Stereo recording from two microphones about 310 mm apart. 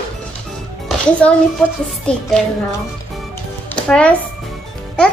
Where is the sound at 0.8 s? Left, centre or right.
Centre.